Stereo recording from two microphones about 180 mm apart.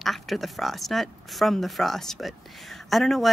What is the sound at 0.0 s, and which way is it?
Speech, centre (ahead or behind).